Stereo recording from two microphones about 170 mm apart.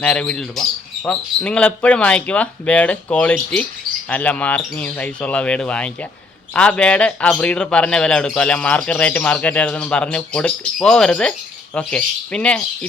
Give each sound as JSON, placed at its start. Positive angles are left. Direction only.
{"t": 0.0, "sound": "speech", "side_deg": 5}